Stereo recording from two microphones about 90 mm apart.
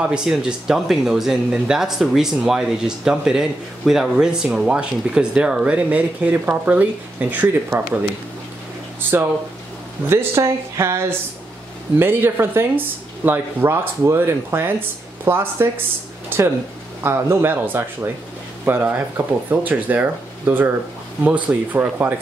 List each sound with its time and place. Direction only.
0.0 s speech: 10° right (ahead or behind)
10.0 s speech: 30° right (ahead or behind)